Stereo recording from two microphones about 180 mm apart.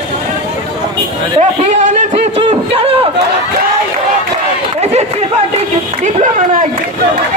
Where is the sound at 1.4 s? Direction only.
40° right (ahead or behind).